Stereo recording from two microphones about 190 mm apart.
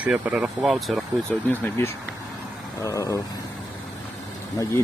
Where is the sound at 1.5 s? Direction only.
10° left (ahead or behind).